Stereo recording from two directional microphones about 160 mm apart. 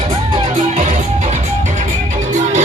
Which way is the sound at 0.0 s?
35° right (ahead or behind).